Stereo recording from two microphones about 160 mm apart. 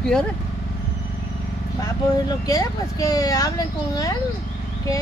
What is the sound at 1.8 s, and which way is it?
Speech, 25° left (ahead or behind).